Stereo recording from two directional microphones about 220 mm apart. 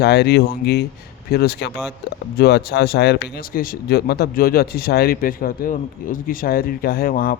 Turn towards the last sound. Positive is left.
turn(degrees=40)  # may be behind; listen again after turning